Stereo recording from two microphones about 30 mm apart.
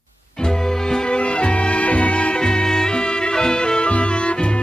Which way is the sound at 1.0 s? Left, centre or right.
Left.